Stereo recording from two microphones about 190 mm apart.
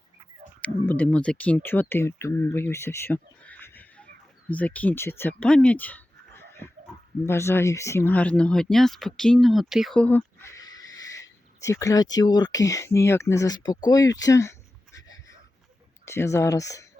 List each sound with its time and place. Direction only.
0.6 s speech: 10° left (ahead or behind)
16.0 s speech: 15° left (ahead or behind)